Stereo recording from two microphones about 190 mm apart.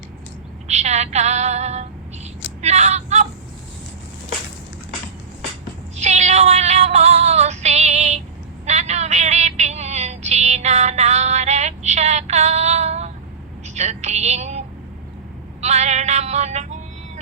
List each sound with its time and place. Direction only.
0.7 s female singing: 35° right (ahead or behind)
2.6 s vehicle: 35° right (ahead or behind)
6.0 s female singing: 35° right (ahead or behind)
8.6 s a sound: 35° right (ahead or behind)
13.7 s music: 35° right (ahead or behind)
15.6 s music: 35° right (ahead or behind)